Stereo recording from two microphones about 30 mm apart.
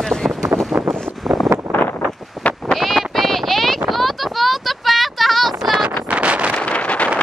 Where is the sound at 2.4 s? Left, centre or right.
Left.